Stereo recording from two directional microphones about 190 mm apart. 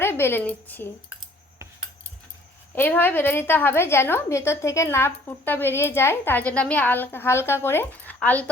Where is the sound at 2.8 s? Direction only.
10° left (ahead or behind).